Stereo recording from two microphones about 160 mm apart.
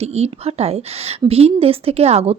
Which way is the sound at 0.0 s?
40° right (ahead or behind).